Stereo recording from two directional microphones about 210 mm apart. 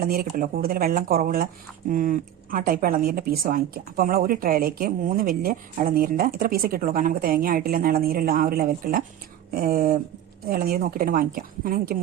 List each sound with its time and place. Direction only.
0.0 s speech: 45° right (ahead or behind)